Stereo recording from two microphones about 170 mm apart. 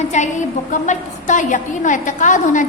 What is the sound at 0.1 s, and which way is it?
A woman's voice, 45° left (ahead or behind).